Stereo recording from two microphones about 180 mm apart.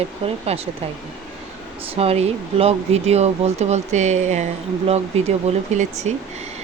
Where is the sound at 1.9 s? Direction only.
35° right (ahead or behind).